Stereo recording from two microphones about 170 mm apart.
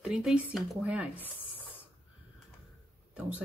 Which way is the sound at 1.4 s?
10° left (ahead or behind).